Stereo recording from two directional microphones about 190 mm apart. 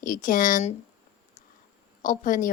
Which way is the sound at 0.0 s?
45° left (ahead or behind).